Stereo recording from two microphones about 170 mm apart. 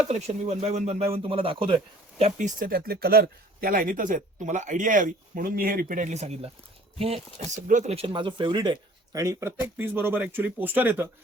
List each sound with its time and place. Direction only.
0.1 s speech: 40° right (ahead or behind); by 11.1 s 10° right (ahead or behind)